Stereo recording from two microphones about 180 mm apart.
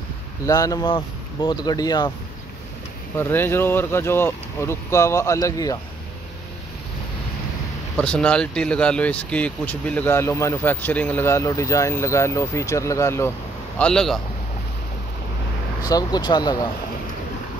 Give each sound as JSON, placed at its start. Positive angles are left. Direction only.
{"t": 0.5, "sound": "speech", "side_deg": 20}
{"t": 3.2, "sound": "speech", "side_deg": 10}
{"t": 8.0, "sound": "speech", "side_deg": 5}
{"t": 13.7, "sound": "a man's voice", "side_deg": 5}
{"t": 15.8, "sound": "speech", "side_deg": 20}